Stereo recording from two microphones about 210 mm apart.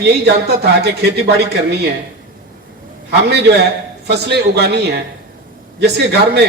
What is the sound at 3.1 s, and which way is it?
Speech, 50° right (ahead or behind).